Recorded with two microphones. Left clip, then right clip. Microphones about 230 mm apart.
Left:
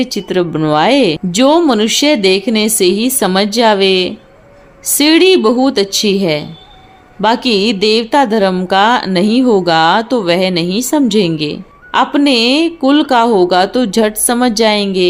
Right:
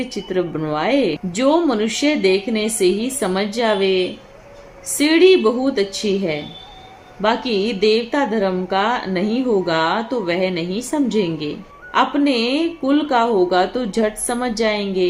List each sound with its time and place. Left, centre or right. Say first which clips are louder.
0.0 s speech: left 7 dB; left